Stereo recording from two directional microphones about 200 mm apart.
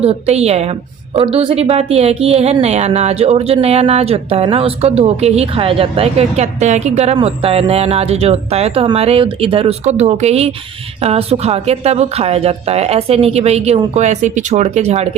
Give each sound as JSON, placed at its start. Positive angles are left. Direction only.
{"t": 0.0, "sound": "a woman's voice", "side_deg": -30}